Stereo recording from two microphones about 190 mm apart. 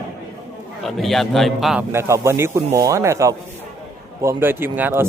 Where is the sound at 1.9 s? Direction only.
15° right (ahead or behind).